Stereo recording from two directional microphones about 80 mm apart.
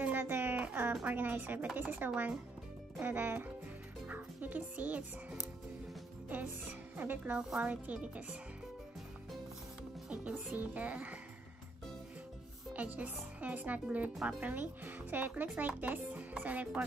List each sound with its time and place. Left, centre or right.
0.0 s music: right
1.0 s speech: right
7.3 s speech: centre
10.3 s speech: right
12.7 s speech: centre